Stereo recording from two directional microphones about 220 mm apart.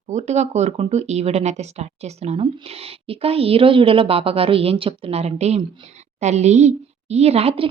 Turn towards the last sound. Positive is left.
turn(degrees=-25)  # may be behind; listen again after turning